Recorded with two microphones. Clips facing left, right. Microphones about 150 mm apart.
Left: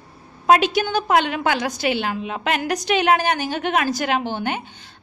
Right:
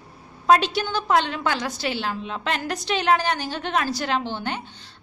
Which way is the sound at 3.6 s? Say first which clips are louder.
Left 3 dB; 60° left (ahead or behind).